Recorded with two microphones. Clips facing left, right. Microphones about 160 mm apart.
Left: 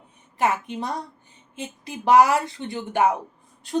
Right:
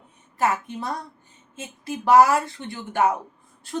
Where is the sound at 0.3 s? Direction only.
20° left (ahead or behind).